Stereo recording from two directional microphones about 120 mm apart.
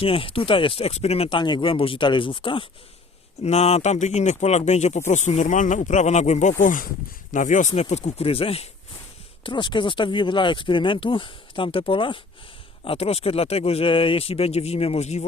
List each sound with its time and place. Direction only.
0.0 s speech: 50° left (ahead or behind)
3.4 s speech: 65° left (ahead or behind)
9.4 s speech: 40° left (ahead or behind); by 15.2 s 65° left (ahead or behind)